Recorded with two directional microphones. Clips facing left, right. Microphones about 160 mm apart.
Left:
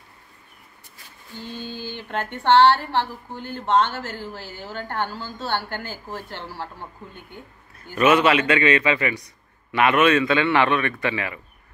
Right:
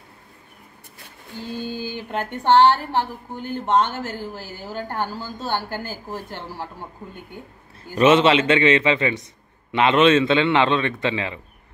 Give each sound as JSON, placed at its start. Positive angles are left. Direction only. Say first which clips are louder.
{"t": 1.4, "sound": "a sound", "louder": "right 4 dB", "side_deg": -10}
{"t": 2.6, "sound": "speech", "louder": "even", "side_deg": -15}
{"t": 7.9, "sound": "a man's voice", "louder": "right 2 dB", "side_deg": -25}